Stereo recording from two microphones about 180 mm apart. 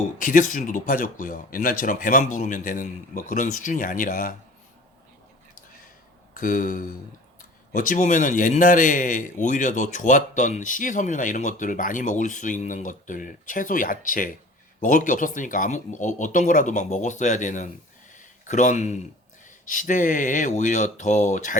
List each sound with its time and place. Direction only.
0.2 s speech: 45° left (ahead or behind)
6.3 s speech: 45° left (ahead or behind)
18.1 s a sound: 45° left (ahead or behind)
19.5 s speech: 45° left (ahead or behind)